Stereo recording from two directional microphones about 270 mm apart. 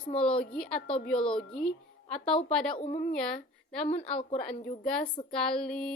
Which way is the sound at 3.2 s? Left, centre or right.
Centre.